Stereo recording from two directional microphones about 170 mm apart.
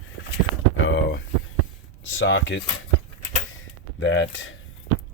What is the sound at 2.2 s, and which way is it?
Speech, 90° left.